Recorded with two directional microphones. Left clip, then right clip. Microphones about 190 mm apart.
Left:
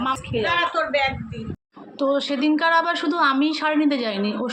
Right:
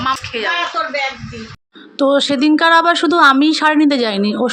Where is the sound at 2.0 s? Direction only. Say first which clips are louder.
Right 8 dB; 60° right (ahead or behind).